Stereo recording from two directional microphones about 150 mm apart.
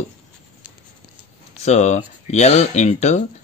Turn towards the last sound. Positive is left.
turn(degrees=50)  # may be behind; listen again after turning